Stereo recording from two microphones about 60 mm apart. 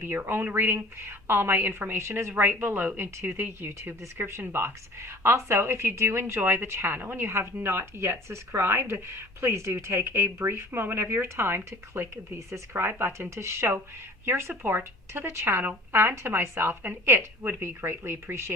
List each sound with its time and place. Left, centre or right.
0.0 s speech: right
2.3 s speech: right
12.5 s speech: right
12.8 s speech: right